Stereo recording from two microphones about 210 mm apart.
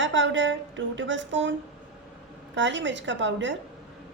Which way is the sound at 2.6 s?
60° right (ahead or behind).